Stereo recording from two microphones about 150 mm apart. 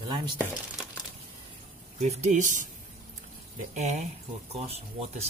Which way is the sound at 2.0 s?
50° right (ahead or behind).